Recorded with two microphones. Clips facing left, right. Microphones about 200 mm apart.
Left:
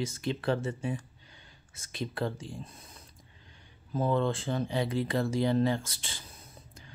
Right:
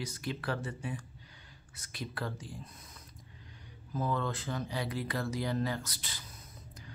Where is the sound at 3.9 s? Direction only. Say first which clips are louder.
Left 6 dB; 25° left (ahead or behind).